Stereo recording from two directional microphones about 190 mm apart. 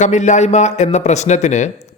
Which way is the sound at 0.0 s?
40° left (ahead or behind).